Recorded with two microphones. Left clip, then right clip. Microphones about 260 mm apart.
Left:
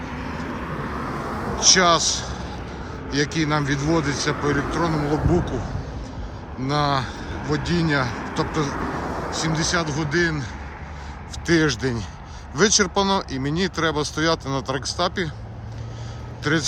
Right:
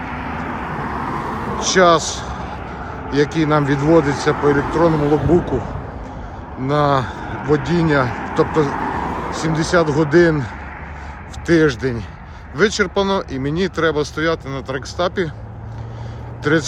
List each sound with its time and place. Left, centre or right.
0.0 s vehicle: centre
1.6 s a man's voice: centre
6.7 s a man's voice: centre
8.7 s a sound: centre
9.4 s a man's voice: centre
16.4 s speech: centre